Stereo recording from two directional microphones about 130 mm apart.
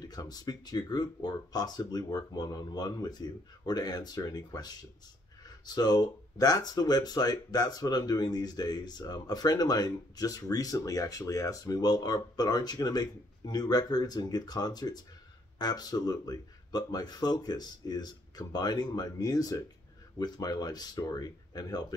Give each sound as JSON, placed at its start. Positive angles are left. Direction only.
{"t": 0.0, "sound": "speech", "side_deg": 30}